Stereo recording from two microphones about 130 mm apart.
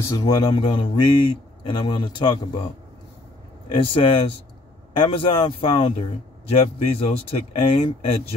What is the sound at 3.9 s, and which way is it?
A man's voice, 45° left (ahead or behind).